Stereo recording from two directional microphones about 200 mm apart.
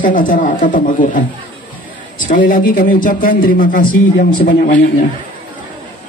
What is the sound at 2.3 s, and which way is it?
Speech, 40° left (ahead or behind).